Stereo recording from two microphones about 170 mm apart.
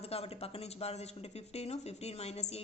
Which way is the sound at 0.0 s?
35° left (ahead or behind).